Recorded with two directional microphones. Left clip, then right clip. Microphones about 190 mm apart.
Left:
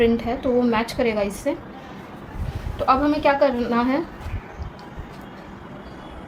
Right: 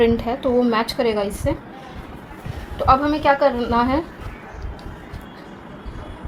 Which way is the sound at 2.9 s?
20° right (ahead or behind).